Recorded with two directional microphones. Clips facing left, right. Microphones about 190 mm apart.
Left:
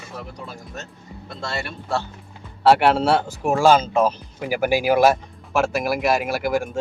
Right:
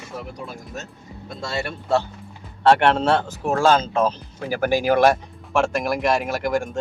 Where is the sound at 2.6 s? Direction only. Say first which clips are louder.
Left 1 dB; 5° left (ahead or behind).